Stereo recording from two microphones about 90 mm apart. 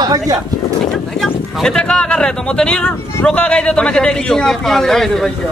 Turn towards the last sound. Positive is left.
turn(degrees=5)  # may be behind; listen again after turning